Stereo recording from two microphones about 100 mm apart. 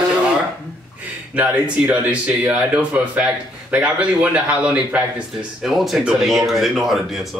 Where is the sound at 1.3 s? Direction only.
15° right (ahead or behind).